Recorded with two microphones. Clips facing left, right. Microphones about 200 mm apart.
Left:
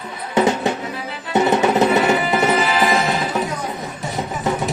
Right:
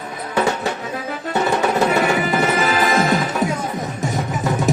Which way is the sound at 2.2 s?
45° right (ahead or behind).